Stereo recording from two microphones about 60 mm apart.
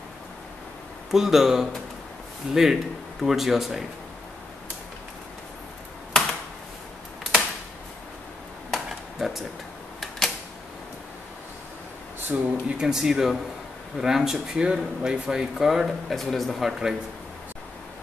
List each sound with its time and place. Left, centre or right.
1.1 s speech: centre
8.7 s a sound: centre
12.3 s speech: right
12.6 s speech: centre